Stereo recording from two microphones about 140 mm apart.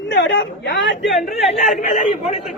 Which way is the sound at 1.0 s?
Centre (ahead or behind).